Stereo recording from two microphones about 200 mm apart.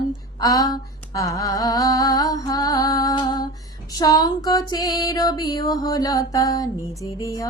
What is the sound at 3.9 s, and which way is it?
Female singing, 20° left (ahead or behind).